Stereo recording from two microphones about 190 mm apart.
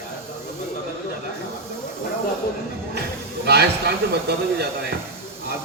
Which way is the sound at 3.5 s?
60° right (ahead or behind).